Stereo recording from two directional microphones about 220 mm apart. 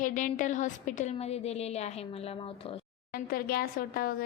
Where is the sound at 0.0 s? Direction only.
35° left (ahead or behind).